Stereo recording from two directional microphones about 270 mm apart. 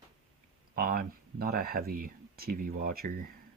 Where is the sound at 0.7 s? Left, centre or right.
Right.